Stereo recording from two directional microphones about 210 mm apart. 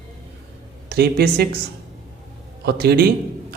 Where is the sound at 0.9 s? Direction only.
50° right (ahead or behind).